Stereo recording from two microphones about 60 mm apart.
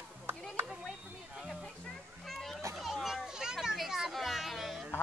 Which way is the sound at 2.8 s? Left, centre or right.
Centre.